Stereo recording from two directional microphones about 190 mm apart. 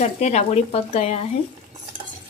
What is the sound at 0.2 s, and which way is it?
Speech, 35° left (ahead or behind).